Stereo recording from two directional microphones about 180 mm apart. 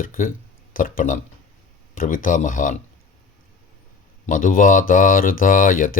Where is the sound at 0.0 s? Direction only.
50° left (ahead or behind).